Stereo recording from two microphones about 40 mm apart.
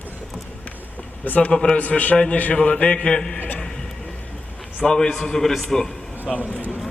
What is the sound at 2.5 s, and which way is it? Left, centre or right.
Speech, left.